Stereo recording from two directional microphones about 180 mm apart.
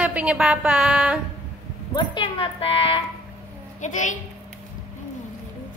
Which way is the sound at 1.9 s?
30° left (ahead or behind).